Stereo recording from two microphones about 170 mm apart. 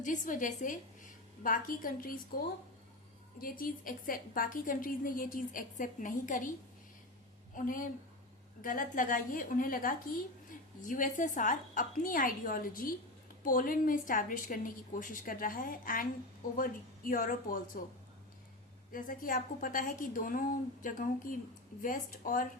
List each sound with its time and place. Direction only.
0.0 s a woman's voice: 50° left (ahead or behind)
3.4 s a woman's voice: 55° left (ahead or behind)
7.5 s a woman's voice: 55° left (ahead or behind)
18.9 s a woman's voice: 55° left (ahead or behind)